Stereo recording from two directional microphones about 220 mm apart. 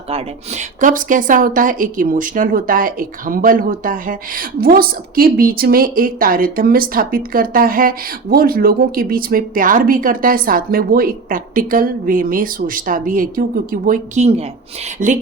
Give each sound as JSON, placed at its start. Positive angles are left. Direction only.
{"t": 0.1, "sound": "speech", "side_deg": -30}